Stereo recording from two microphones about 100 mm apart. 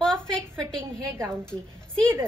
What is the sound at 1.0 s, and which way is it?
Speech, 25° right (ahead or behind).